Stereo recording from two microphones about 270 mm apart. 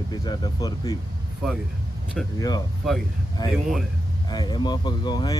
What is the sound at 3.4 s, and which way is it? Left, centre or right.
Speech, centre.